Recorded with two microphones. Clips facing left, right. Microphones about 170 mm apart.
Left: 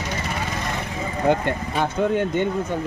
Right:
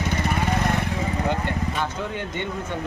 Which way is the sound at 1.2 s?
55° left (ahead or behind).